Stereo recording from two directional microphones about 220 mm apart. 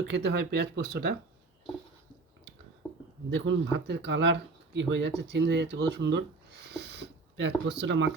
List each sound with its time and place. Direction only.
0.0 s speech: 50° right (ahead or behind)
3.2 s speech: 55° right (ahead or behind)